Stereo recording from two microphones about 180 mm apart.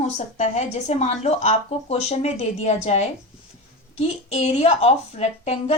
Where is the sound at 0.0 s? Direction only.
40° left (ahead or behind).